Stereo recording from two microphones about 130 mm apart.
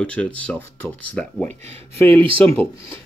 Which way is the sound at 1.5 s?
55° right (ahead or behind).